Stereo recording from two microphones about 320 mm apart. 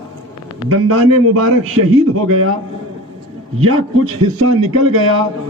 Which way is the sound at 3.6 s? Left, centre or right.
Right.